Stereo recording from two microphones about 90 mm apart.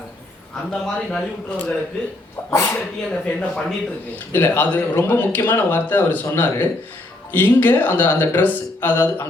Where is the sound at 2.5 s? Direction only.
25° left (ahead or behind).